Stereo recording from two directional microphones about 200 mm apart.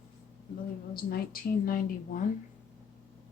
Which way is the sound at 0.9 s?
45° left (ahead or behind).